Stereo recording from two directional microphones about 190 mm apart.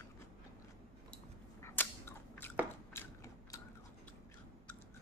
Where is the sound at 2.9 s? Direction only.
15° left (ahead or behind).